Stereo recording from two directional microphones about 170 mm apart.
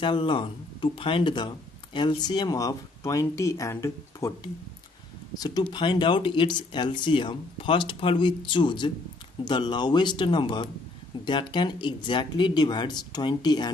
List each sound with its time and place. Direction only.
0.0 s speech: 30° left (ahead or behind)
5.4 s speech: 25° left (ahead or behind)